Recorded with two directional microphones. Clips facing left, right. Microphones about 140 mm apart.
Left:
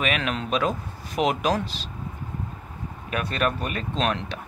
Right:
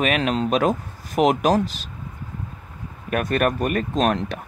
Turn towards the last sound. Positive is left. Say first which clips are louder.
# right 5 dB
turn(degrees=-40)  # may be behind; listen again after turning